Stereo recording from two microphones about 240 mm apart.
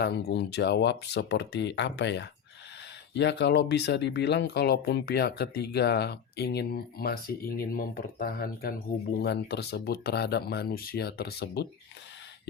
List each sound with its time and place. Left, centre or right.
0.0 s speech: left